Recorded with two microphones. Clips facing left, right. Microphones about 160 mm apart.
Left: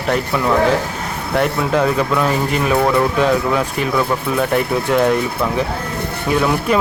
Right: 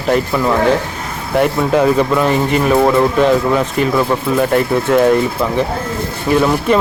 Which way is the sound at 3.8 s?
Centre (ahead or behind).